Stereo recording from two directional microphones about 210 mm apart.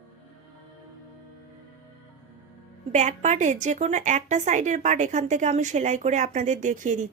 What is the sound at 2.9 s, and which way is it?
A woman's voice, 35° right (ahead or behind).